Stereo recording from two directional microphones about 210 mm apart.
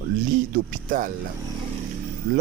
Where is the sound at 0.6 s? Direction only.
40° right (ahead or behind).